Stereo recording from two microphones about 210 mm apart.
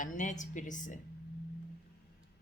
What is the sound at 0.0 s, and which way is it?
Speech, 35° left (ahead or behind).